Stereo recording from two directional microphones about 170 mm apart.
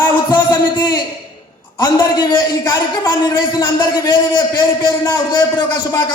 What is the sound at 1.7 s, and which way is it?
A man's voice, 25° left (ahead or behind).